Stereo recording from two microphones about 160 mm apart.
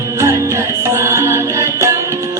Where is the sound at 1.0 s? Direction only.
15° right (ahead or behind).